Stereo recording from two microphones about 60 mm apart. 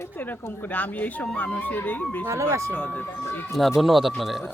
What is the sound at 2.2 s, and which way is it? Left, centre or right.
Speech, right.